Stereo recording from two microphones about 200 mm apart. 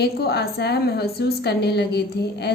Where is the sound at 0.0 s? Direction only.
55° left (ahead or behind).